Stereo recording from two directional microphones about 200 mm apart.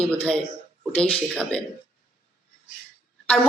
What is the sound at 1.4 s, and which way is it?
Speech, 5° left (ahead or behind).